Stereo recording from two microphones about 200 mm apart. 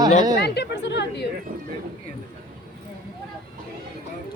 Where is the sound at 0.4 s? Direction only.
55° left (ahead or behind).